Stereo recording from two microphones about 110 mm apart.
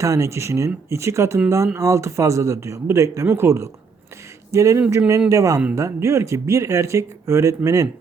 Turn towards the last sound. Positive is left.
turn(degrees=-30)  # may be behind; listen again after turning